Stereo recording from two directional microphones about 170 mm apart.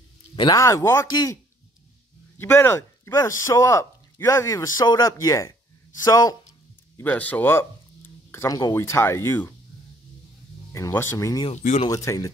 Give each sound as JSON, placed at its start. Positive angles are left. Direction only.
{"t": 0.4, "sound": "speech", "side_deg": 20}
{"t": 7.0, "sound": "speech", "side_deg": 10}
{"t": 10.7, "sound": "speech", "side_deg": 15}
{"t": 11.5, "sound": "speech", "side_deg": 45}
{"t": 11.9, "sound": "speech", "side_deg": 20}